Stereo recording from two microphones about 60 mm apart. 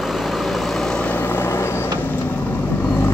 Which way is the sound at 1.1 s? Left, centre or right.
Left.